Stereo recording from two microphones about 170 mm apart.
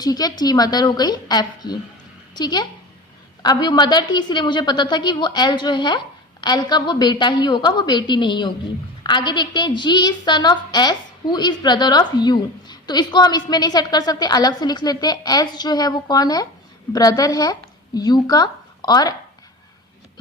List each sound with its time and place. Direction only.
0.0 s a woman's voice: 25° left (ahead or behind)